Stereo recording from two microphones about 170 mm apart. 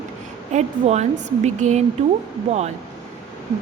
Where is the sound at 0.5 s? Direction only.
40° right (ahead or behind).